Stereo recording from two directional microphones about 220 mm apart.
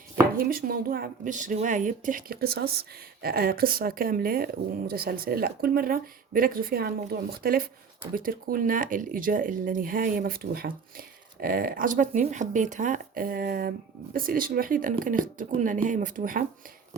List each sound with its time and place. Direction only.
0.3 s speech: 40° right (ahead or behind)